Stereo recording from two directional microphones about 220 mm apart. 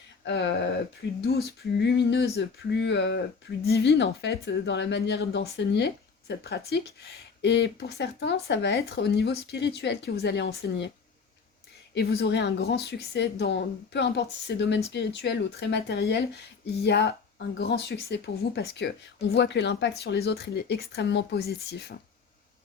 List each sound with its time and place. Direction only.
0.3 s a woman's voice: 50° left (ahead or behind)
11.9 s a woman's voice: 50° left (ahead or behind)